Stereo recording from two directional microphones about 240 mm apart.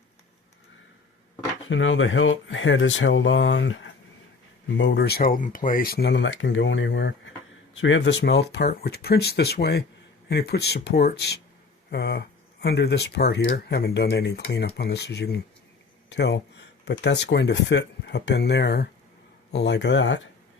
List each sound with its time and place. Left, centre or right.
1.6 s speech: left